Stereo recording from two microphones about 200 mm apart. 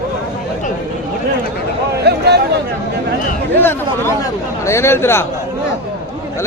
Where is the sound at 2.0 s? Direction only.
55° right (ahead or behind).